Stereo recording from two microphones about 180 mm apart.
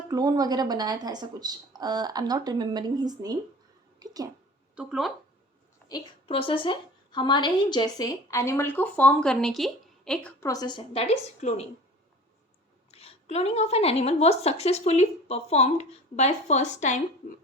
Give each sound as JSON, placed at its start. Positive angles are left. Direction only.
{"t": 0.1, "sound": "a woman's voice", "side_deg": -20}
{"t": 4.8, "sound": "speech", "side_deg": 0}
{"t": 5.9, "sound": "a woman's voice", "side_deg": 30}
{"t": 10.4, "sound": "a woman's voice", "side_deg": 20}
{"t": 12.9, "sound": "a woman's voice", "side_deg": 35}